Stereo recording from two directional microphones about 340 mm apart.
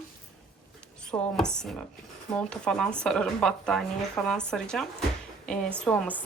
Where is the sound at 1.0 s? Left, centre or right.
Centre.